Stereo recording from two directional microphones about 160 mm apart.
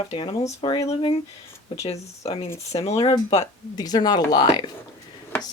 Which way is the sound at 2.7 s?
40° left (ahead or behind).